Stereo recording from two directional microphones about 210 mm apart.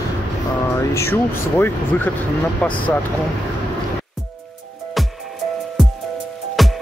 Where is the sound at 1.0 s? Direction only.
10° left (ahead or behind).